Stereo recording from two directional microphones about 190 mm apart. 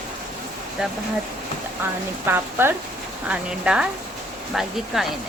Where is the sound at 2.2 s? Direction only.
10° right (ahead or behind).